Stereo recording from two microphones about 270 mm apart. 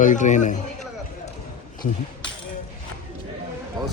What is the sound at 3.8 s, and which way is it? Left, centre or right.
Music, centre.